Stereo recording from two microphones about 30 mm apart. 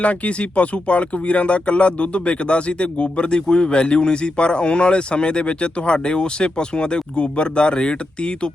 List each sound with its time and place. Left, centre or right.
0.0 s speech: left